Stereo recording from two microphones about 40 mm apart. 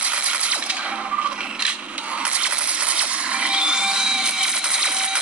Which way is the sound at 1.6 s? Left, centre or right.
Right.